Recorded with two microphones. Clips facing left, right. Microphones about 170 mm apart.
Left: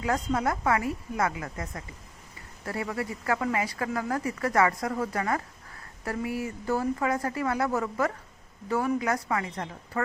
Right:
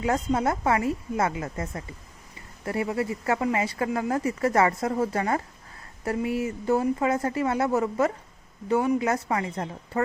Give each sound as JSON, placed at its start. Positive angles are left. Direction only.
{"t": 0.0, "sound": "speech", "side_deg": -25}